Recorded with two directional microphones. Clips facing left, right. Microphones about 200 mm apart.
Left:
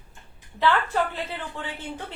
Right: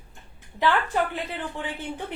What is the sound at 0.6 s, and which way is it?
A woman's voice, 15° right (ahead or behind).